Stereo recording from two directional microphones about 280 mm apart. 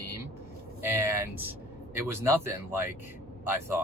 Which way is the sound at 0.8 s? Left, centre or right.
Centre.